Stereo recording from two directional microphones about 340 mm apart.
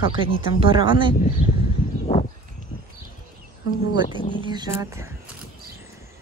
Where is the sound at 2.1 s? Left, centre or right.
Centre.